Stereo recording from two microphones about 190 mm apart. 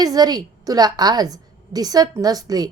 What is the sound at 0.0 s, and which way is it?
A woman's voice, 20° right (ahead or behind).